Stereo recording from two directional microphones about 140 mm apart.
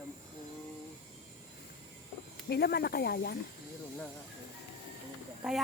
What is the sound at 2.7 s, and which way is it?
Speech, 90° left.